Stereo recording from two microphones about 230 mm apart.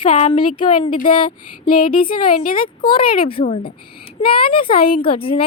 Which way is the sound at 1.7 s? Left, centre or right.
Left.